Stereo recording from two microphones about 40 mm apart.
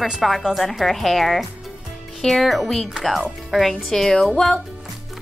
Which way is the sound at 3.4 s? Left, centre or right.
Centre.